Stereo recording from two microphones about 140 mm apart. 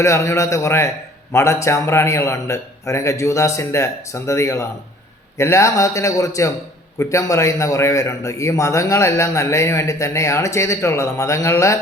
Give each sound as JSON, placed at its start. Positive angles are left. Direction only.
{"t": 0.0, "sound": "a man's voice", "side_deg": 20}